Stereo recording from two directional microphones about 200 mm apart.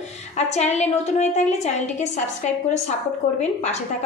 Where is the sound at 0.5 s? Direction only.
35° left (ahead or behind).